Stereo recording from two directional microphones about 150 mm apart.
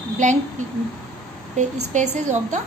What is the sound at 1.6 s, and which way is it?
A woman's voice, 55° right (ahead or behind).